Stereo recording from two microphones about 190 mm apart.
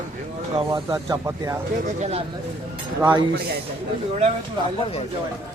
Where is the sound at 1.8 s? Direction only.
35° right (ahead or behind).